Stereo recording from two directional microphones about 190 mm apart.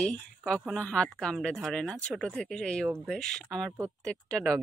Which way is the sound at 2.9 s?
10° right (ahead or behind).